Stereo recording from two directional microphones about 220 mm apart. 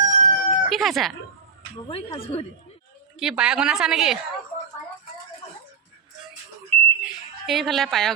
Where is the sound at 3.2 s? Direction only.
5° right (ahead or behind).